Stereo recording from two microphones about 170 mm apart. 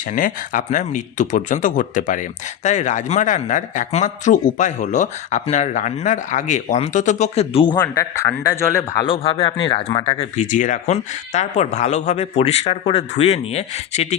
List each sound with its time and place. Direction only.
0.1 s a man's voice: 50° left (ahead or behind); by 7.8 s 30° left (ahead or behind)
7.8 s a man's voice: 20° left (ahead or behind)
9.0 s speech: 30° left (ahead or behind)